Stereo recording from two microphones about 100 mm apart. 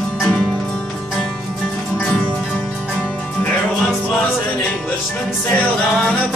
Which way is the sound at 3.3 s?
10° left (ahead or behind).